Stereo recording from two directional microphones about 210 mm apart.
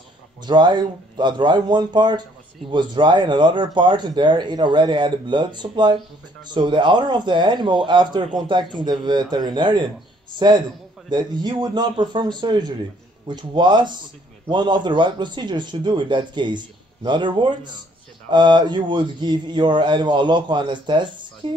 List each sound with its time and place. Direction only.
0.5 s speech: 20° right (ahead or behind)
11.1 s speech: 20° right (ahead or behind)